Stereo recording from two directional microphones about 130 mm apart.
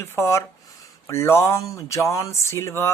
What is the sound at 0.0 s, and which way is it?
A woman's voice, 20° left (ahead or behind).